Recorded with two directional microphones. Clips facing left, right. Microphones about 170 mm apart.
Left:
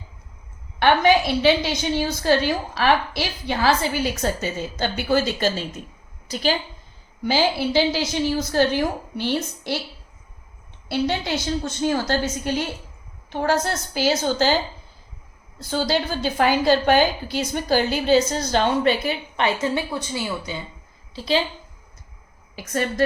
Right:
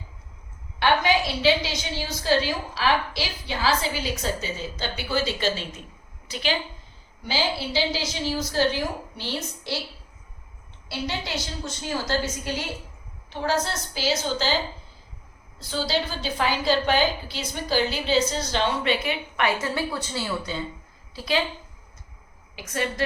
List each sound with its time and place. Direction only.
0.8 s a woman's voice: 55° left (ahead or behind)
7.3 s a woman's voice: 50° left (ahead or behind)
11.6 s a woman's voice: 55° left (ahead or behind)
13.3 s a woman's voice: 50° left (ahead or behind)
19.4 s a woman's voice: 25° left (ahead or behind)
22.5 s a woman's voice: 45° left (ahead or behind)